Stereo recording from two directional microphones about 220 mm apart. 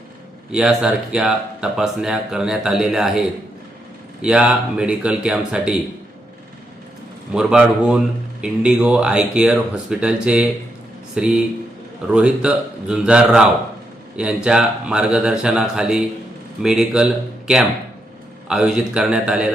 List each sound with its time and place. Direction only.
0.5 s speech: 5° right (ahead or behind)
7.3 s speech: 5° right (ahead or behind)